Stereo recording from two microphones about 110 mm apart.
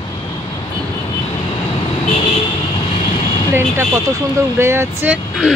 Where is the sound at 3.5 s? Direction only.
25° right (ahead or behind).